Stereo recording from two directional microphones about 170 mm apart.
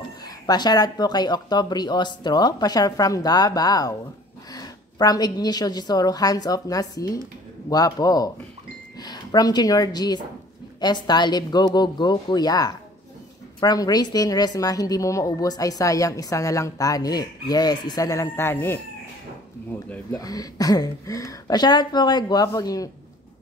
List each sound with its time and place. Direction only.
0.2 s a woman's voice: 25° left (ahead or behind)
19.9 s a woman's voice: 20° left (ahead or behind)